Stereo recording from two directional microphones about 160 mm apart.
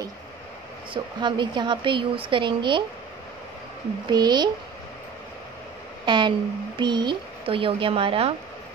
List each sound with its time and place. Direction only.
0.9 s speech: 30° right (ahead or behind)
4.1 s speech: 25° right (ahead or behind)
6.0 s speech: 30° right (ahead or behind)